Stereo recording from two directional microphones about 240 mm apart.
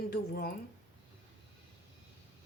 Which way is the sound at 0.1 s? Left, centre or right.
Left.